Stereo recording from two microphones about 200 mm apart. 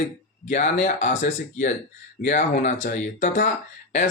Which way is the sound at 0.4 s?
35° left (ahead or behind).